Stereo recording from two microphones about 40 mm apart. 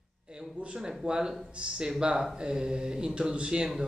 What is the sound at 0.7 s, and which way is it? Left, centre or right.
Speech, centre.